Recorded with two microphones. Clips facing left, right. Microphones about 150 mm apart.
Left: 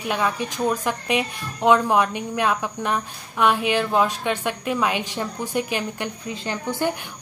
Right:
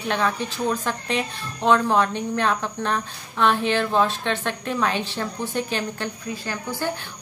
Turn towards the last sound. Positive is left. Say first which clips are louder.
# left 3 dB
turn(degrees=20)  # may be behind; listen again after turning